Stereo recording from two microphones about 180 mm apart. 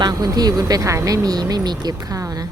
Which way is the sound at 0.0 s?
20° right (ahead or behind).